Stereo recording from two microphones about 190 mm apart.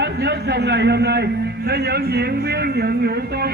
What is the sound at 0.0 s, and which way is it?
A man's voice, 60° right (ahead or behind).